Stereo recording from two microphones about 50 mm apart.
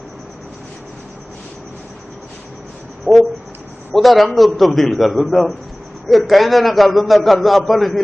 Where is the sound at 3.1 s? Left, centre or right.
Centre.